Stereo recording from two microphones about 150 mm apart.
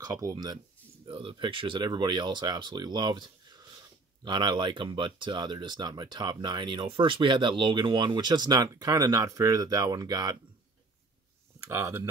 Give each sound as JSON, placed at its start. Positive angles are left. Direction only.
{"t": 0.0, "sound": "speech", "side_deg": -25}
{"t": 11.6, "sound": "speech", "side_deg": -20}